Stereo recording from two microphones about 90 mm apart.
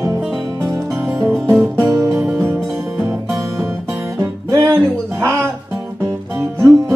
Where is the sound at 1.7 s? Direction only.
35° right (ahead or behind).